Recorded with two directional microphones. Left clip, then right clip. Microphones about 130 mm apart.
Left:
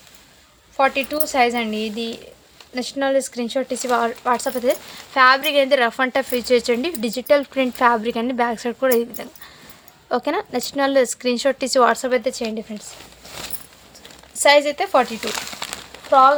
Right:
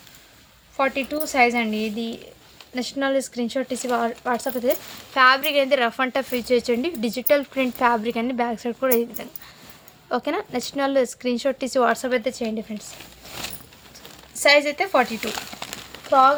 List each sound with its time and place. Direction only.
0.8 s speech: 35° left (ahead or behind)
14.3 s speech: 40° left (ahead or behind)
15.3 s a sound: 20° left (ahead or behind)
16.0 s speech: 35° left (ahead or behind)